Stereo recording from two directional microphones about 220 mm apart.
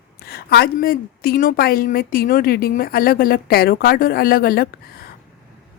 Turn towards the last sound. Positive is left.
turn(degrees=40)  # may be behind; listen again after turning